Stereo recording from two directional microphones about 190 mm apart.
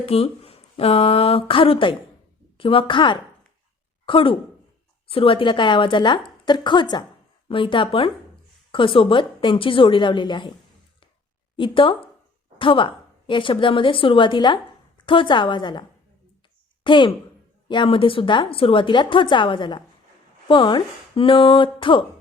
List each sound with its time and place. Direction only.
0.0 s a woman's voice: 30° left (ahead or behind)
11.5 s a woman's voice: 25° left (ahead or behind)